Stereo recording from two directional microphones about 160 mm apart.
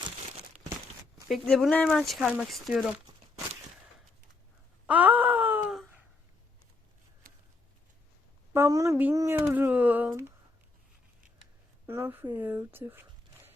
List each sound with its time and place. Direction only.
1.3 s speech: centre (ahead or behind)
4.9 s wail: 10° right (ahead or behind)
8.5 s speech: 15° right (ahead or behind)
11.9 s speech: 15° right (ahead or behind)